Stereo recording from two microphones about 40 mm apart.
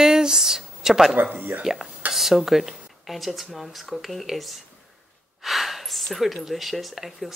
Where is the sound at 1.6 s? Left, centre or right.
Centre.